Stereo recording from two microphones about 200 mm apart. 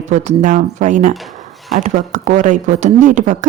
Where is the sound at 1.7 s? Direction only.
40° right (ahead or behind).